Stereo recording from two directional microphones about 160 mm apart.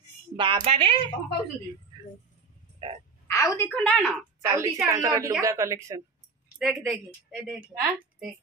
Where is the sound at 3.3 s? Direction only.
20° left (ahead or behind).